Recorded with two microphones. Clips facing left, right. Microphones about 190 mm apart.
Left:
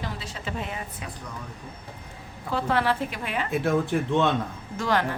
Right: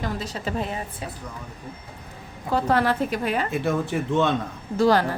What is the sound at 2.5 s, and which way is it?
Speech, 40° right (ahead or behind).